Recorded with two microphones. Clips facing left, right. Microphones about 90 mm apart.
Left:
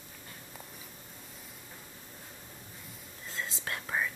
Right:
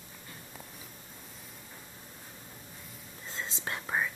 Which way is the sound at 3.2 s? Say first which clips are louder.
Even; 20° right (ahead or behind).